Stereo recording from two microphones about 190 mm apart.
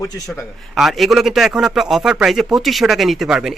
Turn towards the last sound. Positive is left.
turn(degrees=-5)  # may be behind; listen again after turning